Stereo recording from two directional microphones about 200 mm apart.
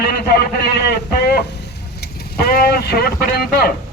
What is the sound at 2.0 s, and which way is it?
Speech, 50° left (ahead or behind).